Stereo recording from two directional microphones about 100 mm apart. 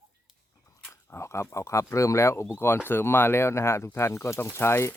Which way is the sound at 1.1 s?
25° left (ahead or behind).